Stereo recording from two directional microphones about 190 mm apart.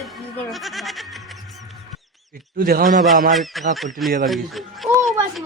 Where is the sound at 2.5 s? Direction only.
50° right (ahead or behind).